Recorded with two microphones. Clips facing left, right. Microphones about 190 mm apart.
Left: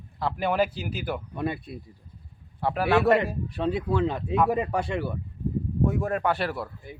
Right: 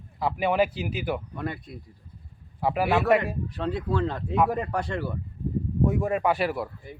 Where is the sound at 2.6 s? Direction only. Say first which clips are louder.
Left 2 dB; 5° right (ahead or behind).